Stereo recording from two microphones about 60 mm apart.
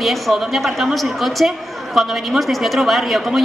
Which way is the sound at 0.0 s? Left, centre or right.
Centre.